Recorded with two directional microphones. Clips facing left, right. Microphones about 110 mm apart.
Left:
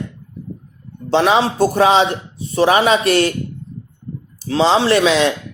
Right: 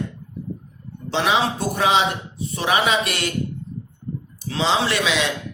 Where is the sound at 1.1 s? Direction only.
35° left (ahead or behind).